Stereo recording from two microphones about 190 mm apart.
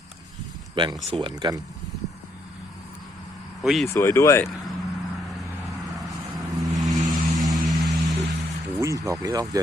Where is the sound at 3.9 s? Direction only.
15° left (ahead or behind).